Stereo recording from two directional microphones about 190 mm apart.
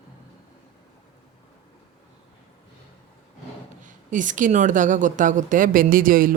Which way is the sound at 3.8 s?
40° right (ahead or behind).